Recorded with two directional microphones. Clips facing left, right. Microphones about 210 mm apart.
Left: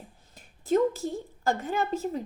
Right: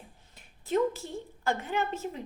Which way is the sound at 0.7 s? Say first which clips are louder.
Left 4 dB; 40° left (ahead or behind).